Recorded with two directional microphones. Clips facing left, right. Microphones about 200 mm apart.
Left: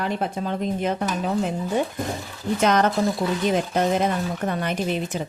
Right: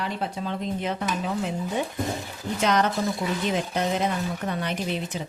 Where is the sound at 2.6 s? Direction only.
50° left (ahead or behind).